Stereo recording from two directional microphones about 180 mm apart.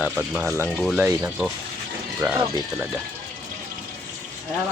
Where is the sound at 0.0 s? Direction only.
10° right (ahead or behind).